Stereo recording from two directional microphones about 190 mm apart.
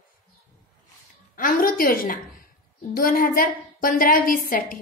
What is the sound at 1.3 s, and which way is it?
A woman's voice, 45° left (ahead or behind).